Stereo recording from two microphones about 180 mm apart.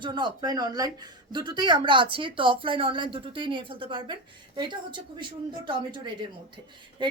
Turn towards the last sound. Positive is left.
turn(degrees=-25)  # may be behind; listen again after turning